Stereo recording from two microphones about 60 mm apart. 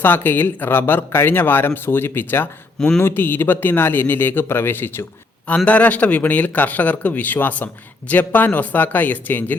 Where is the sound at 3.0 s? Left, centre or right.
Left.